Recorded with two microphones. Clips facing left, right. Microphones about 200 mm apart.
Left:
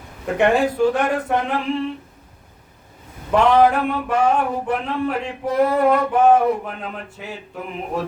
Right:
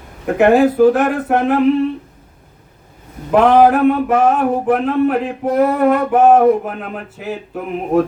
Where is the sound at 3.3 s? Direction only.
55° right (ahead or behind).